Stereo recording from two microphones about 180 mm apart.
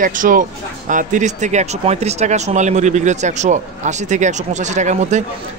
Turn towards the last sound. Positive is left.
turn(degrees=-40)  # may be behind; listen again after turning